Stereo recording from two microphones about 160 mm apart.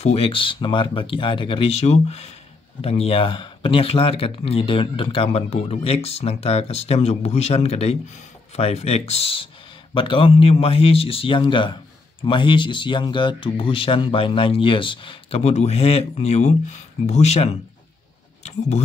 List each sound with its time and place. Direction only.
0.0 s speech: 40° left (ahead or behind)